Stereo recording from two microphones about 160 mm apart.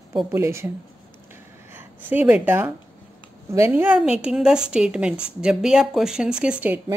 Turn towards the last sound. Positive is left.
turn(degrees=-10)  # may be behind; listen again after turning